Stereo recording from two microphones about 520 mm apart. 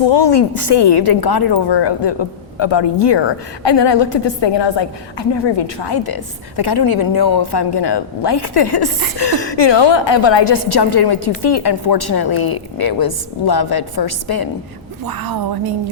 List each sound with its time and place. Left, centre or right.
0.0 s a woman's voice: left
15.0 s a woman's voice: right